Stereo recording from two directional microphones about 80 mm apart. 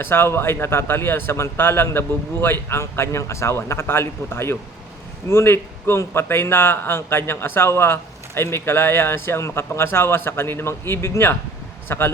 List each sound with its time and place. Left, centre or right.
0.0 s speech: left